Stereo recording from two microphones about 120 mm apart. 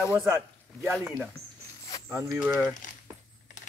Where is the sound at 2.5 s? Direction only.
20° right (ahead or behind).